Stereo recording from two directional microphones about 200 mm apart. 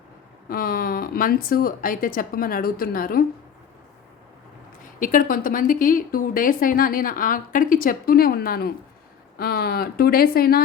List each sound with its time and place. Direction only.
0.4 s a woman's voice: 45° left (ahead or behind)
4.9 s a woman's voice: 40° left (ahead or behind)